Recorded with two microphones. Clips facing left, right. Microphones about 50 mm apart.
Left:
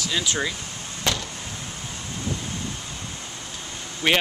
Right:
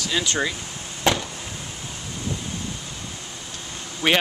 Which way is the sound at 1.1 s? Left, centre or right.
Centre.